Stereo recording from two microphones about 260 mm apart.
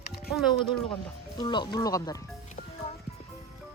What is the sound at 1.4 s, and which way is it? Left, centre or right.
Speech, centre.